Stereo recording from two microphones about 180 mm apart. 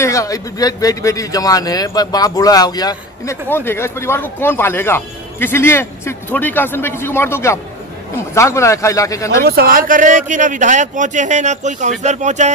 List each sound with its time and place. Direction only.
0.0 s speech: 20° left (ahead or behind)
9.4 s a man's voice: 60° right (ahead or behind); by 12.5 s 40° right (ahead or behind)